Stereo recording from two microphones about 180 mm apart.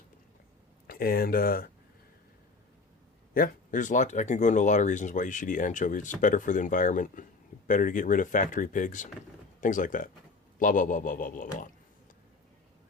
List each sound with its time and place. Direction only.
0.9 s speech: 55° left (ahead or behind)
3.3 s speech: 50° left (ahead or behind)